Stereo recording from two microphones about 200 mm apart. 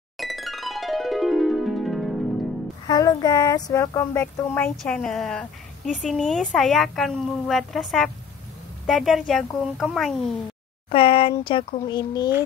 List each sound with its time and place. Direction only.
0.2 s music: centre (ahead or behind)
2.9 s speech: 20° left (ahead or behind); by 10.3 s centre (ahead or behind)
10.9 s speech: 25° left (ahead or behind)